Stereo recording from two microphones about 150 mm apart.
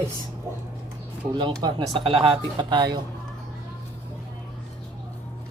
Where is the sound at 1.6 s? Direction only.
35° right (ahead or behind).